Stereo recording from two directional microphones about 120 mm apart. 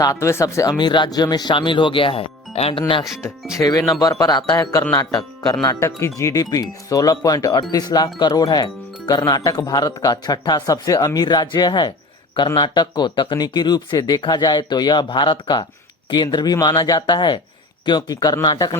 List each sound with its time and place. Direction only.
0.0 s speech: 25° left (ahead or behind); by 3.0 s 50° left (ahead or behind)
3.6 s speech: 30° left (ahead or behind)